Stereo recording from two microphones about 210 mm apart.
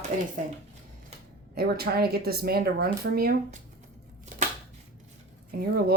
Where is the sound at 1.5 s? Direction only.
45° right (ahead or behind).